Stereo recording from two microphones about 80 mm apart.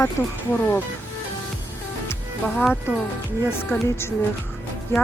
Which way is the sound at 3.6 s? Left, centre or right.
Left.